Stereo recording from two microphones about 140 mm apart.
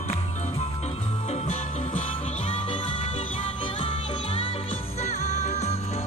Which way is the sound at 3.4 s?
40° left (ahead or behind).